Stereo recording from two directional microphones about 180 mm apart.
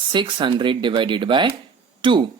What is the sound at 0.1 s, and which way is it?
Speech, 25° right (ahead or behind).